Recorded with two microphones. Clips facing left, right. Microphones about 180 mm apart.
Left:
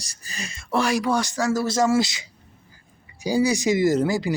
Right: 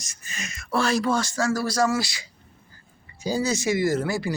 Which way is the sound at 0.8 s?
15° left (ahead or behind).